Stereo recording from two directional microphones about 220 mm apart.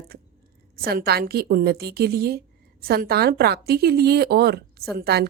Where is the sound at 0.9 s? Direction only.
45° right (ahead or behind).